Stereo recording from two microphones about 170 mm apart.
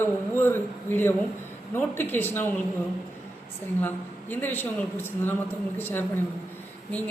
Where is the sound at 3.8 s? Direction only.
10° left (ahead or behind).